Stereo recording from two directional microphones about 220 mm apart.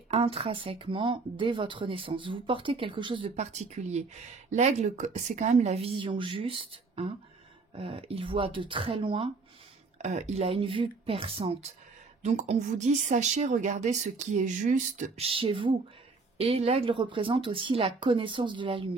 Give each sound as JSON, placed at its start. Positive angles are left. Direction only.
{"t": 0.1, "sound": "a woman's voice", "side_deg": -25}